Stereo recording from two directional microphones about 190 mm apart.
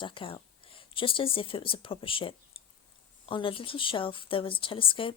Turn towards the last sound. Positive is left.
turn(degrees=30)  # may be behind; listen again after turning